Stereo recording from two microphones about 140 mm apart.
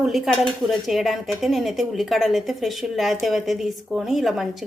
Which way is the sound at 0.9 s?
Centre (ahead or behind).